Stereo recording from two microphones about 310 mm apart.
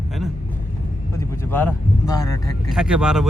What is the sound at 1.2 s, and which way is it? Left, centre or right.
Vehicle, centre.